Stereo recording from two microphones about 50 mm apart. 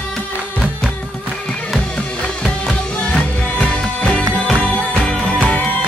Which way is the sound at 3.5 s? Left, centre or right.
Left.